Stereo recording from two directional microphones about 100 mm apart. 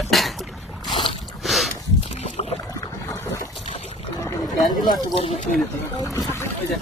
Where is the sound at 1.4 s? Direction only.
Centre (ahead or behind).